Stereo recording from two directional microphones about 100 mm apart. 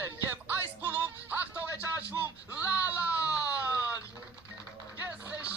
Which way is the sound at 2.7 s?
15° right (ahead or behind).